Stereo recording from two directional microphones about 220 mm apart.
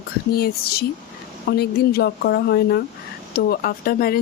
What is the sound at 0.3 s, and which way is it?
A woman's voice, 45° left (ahead or behind).